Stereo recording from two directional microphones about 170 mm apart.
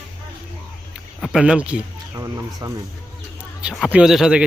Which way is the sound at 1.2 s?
5° right (ahead or behind).